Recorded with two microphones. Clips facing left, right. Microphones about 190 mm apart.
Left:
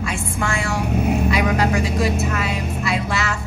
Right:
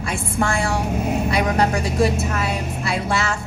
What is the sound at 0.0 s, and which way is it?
Speech, 35° right (ahead or behind).